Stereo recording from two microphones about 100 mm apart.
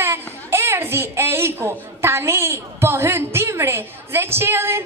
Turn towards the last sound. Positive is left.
turn(degrees=-25)  # may be behind; listen again after turning